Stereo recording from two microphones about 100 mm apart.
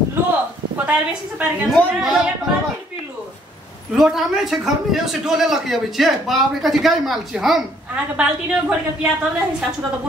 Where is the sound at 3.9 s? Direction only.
5° right (ahead or behind).